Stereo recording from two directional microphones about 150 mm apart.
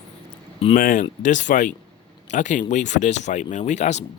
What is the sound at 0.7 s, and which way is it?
Speech, 60° left (ahead or behind).